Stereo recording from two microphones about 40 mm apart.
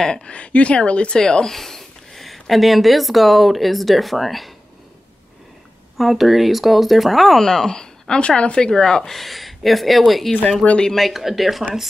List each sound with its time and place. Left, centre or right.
0.0 s a woman's voice: left
1.2 s speech: centre
5.9 s speech: centre
7.4 s speech: centre